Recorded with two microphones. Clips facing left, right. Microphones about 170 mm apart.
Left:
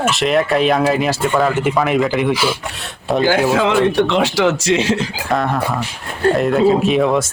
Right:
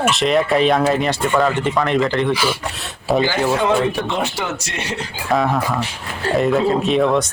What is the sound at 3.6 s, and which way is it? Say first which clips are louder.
Speech: left 4 dB; 90° left.